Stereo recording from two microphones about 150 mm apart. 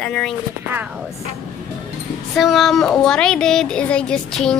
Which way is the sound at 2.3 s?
Centre (ahead or behind).